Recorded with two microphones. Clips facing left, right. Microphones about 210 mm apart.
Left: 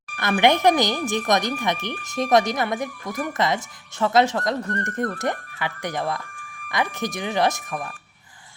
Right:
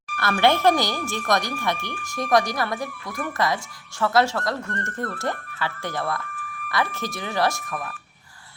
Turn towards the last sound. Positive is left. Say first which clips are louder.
# left 2 dB
turn(degrees=20)  # may be behind; listen again after turning